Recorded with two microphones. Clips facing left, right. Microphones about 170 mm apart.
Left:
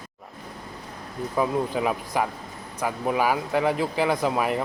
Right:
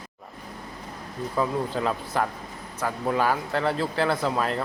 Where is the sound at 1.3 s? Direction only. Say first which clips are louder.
Left 2 dB; 15° left (ahead or behind).